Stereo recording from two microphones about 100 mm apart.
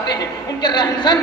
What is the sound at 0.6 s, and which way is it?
Speech, 50° left (ahead or behind).